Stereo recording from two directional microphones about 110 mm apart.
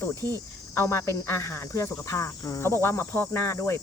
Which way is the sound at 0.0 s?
20° left (ahead or behind).